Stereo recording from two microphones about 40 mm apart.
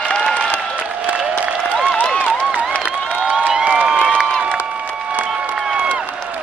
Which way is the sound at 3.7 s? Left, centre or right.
Centre.